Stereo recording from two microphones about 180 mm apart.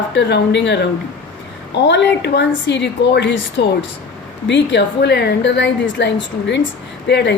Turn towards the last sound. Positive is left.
turn(degrees=70)  # may be behind; listen again after turning